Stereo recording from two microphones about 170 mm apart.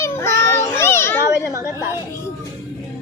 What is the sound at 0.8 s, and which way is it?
Children playing, 15° left (ahead or behind).